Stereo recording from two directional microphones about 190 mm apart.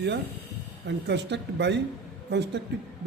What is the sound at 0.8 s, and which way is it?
Speech, 65° right (ahead or behind).